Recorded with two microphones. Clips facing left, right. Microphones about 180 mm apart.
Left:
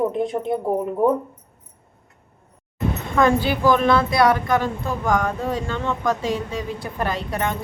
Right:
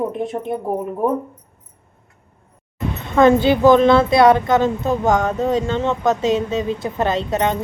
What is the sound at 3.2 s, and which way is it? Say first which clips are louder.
Speech: right 6 dB; 25° right (ahead or behind).